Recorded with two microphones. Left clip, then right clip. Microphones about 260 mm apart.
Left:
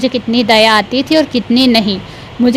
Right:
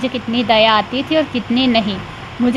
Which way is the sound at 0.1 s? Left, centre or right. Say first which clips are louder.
Left 4 dB; left.